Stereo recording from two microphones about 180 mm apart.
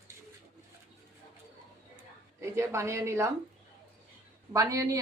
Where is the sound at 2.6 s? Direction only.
15° right (ahead or behind).